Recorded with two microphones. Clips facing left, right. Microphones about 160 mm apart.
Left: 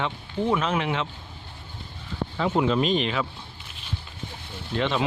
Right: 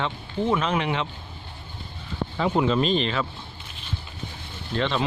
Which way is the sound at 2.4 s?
Centre (ahead or behind).